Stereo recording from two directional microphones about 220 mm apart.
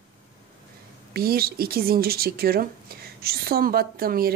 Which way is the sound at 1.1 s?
45° right (ahead or behind).